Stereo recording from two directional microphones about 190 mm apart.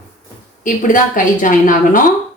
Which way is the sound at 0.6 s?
45° left (ahead or behind).